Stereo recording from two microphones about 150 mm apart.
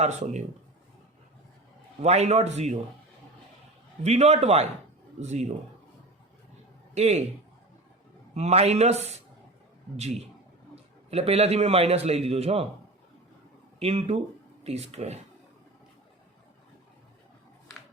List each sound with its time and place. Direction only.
0.0 s a man's voice: 50° right (ahead or behind)
2.0 s a man's voice: 45° right (ahead or behind)
4.0 s a man's voice: 45° right (ahead or behind)
6.9 s a man's voice: 45° right (ahead or behind)
8.4 s a man's voice: 45° right (ahead or behind)
11.1 s a man's voice: 45° right (ahead or behind)
13.7 s a man's voice: 40° right (ahead or behind)